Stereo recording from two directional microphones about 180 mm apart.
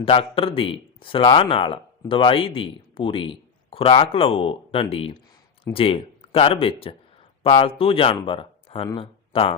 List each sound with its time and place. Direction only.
0.0 s speech: 30° left (ahead or behind)